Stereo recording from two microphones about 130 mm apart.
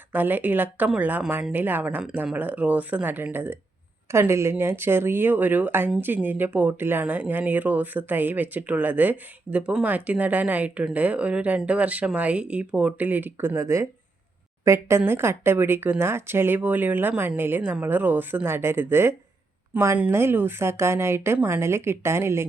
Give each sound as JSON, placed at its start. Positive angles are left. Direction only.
{"t": 0.1, "sound": "speech", "side_deg": -15}